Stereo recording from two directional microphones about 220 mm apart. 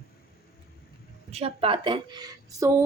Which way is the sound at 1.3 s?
25° right (ahead or behind).